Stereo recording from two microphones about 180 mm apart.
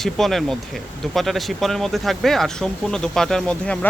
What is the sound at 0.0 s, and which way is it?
Speech, centre (ahead or behind).